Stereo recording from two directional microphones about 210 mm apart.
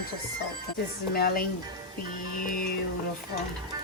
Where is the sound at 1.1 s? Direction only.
45° left (ahead or behind).